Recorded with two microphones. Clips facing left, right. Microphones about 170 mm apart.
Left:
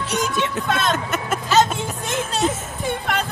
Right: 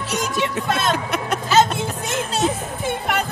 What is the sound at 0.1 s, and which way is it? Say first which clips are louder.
Speech: even; centre (ahead or behind).